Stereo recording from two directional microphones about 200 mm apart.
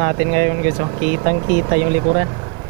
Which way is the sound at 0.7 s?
25° right (ahead or behind).